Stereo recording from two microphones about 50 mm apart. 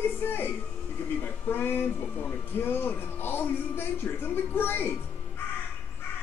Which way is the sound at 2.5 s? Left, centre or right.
Left.